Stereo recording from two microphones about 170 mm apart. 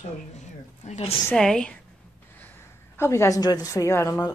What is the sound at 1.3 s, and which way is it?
Speech, 5° left (ahead or behind).